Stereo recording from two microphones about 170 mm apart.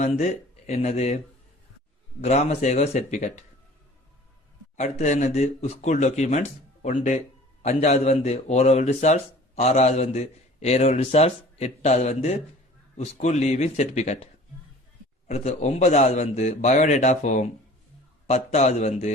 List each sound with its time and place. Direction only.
0.0 s a man's voice: 45° left (ahead or behind)
2.2 s a man's voice: 40° left (ahead or behind)
4.8 s a man's voice: 45° left (ahead or behind)
15.3 s a man's voice: 40° left (ahead or behind)